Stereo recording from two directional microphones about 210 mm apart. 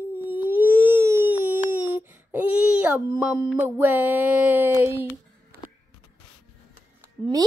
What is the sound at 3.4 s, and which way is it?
Music, 5° right (ahead or behind).